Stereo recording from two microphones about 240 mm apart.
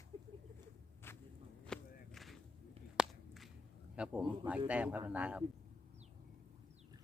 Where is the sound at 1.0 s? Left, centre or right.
Centre.